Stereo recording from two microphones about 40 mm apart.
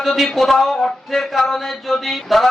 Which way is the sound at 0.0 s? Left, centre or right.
Centre.